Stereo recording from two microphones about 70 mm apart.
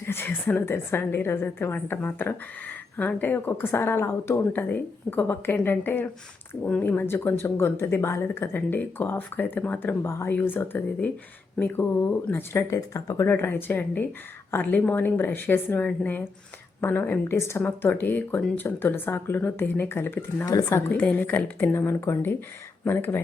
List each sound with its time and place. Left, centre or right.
0.0 s a woman's voice: left
4.5 s speech: left
10.0 s a woman's voice: left
12.3 s a woman's voice: left
12.7 s speech: left
13.2 s a woman's voice: left
17.6 s speech: left
20.4 s speech: left
20.7 s a woman's voice: left
21.2 s speech: left